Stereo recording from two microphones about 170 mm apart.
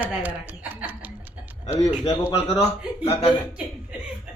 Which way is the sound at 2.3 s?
40° left (ahead or behind).